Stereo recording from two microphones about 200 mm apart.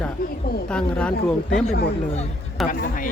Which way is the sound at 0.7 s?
5° left (ahead or behind).